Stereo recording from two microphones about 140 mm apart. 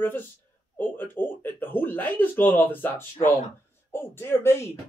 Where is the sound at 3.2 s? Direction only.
60° left (ahead or behind).